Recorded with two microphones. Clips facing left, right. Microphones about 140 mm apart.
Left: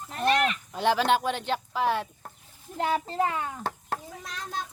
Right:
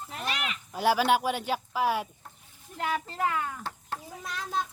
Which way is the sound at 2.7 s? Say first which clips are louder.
Left 5 dB; 30° left (ahead or behind).